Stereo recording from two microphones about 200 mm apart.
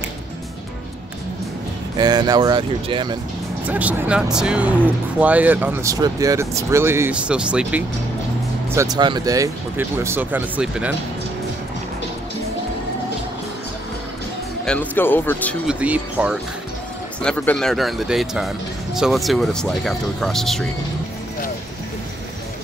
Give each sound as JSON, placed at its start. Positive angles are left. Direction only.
{"t": 2.0, "sound": "speech", "side_deg": -20}
{"t": 3.6, "sound": "speech", "side_deg": -5}
{"t": 8.7, "sound": "speech", "side_deg": -20}
{"t": 14.6, "sound": "speech", "side_deg": 5}
{"t": 15.6, "sound": "speech", "side_deg": -5}
{"t": 17.2, "sound": "speech", "side_deg": 5}